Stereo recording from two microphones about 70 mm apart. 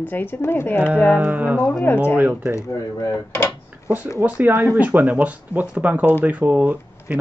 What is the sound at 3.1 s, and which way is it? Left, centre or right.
Speech, left.